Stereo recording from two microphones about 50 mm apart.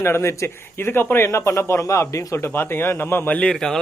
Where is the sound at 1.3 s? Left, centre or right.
Left.